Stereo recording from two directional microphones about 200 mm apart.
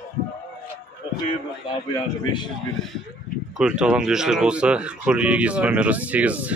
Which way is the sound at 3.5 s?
5° right (ahead or behind).